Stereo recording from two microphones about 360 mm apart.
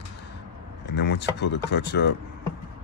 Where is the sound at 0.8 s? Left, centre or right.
Left.